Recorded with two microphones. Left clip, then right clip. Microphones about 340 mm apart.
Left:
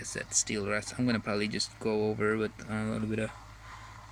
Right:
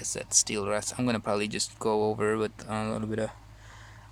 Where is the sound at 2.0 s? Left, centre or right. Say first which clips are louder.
Right 3 dB; right.